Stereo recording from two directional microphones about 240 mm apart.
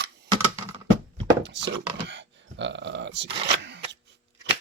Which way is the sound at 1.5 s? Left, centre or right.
Right.